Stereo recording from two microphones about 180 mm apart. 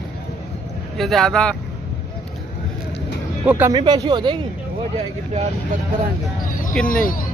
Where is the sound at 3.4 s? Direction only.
10° right (ahead or behind).